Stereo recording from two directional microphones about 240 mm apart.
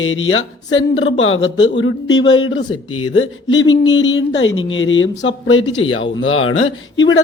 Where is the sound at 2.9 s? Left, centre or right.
Left.